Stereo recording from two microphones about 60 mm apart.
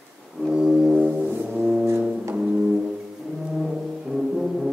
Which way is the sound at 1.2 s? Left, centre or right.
Right.